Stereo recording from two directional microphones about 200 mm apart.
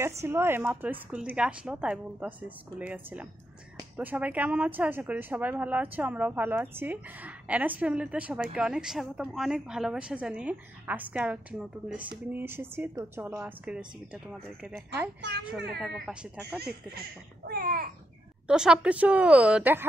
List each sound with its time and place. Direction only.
0.2 s speech: 10° right (ahead or behind)
15.2 s a child's voice: 55° right (ahead or behind)
15.8 s speech: 5° right (ahead or behind)
17.5 s a child's voice: 45° right (ahead or behind)
18.5 s speech: 5° right (ahead or behind)